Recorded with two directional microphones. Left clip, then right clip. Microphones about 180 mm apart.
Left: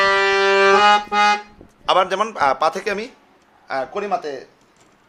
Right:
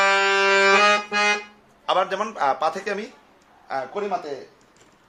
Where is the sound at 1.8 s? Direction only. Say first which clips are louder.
Left 5 dB; 45° left (ahead or behind).